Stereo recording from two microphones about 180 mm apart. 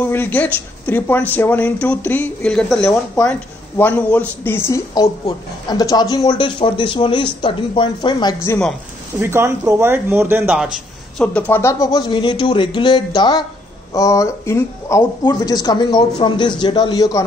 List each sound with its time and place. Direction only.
0.0 s speech: 10° left (ahead or behind)
8.5 s a woman's voice: 5° left (ahead or behind)
9.2 s speech: 15° right (ahead or behind)
11.1 s speech: 5° left (ahead or behind)